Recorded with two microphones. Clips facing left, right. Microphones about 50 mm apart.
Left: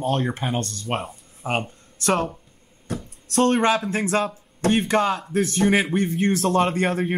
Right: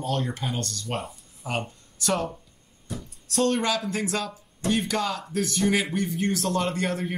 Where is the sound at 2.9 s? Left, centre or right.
Left.